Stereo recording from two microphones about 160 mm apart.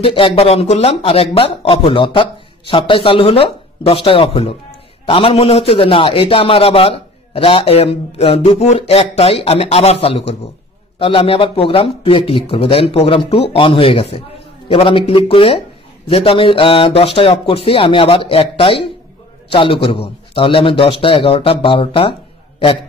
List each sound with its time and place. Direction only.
0.0 s a man's voice: 35° left (ahead or behind)